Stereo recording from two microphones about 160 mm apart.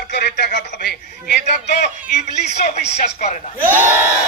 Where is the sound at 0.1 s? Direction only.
90° left.